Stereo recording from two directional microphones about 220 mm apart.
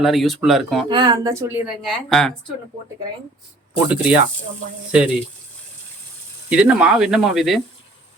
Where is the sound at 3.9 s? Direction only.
5° right (ahead or behind).